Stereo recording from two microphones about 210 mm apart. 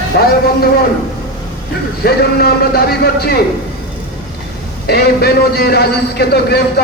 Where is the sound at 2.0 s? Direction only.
45° left (ahead or behind).